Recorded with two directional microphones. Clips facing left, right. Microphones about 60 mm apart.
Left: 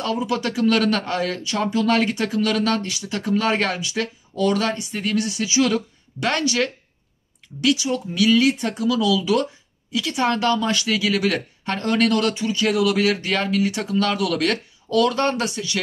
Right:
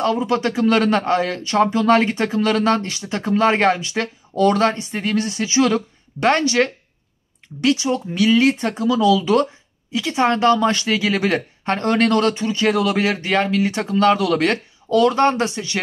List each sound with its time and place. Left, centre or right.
0.0 s speech: right